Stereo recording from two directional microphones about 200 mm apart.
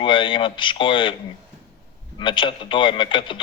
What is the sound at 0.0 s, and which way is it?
A man's voice, 25° left (ahead or behind).